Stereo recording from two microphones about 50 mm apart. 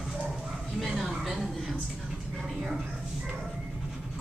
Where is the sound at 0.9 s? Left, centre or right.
Centre.